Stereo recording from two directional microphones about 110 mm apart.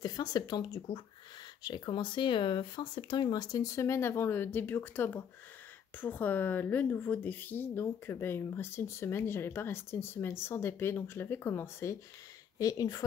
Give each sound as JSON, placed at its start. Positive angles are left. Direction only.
{"t": 0.0, "sound": "speech", "side_deg": 35}
{"t": 0.9, "sound": "speech", "side_deg": 50}